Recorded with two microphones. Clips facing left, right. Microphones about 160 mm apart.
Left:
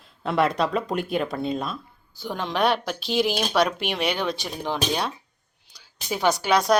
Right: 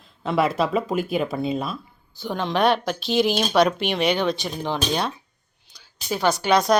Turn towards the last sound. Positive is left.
turn(degrees=5)  # may be behind; listen again after turning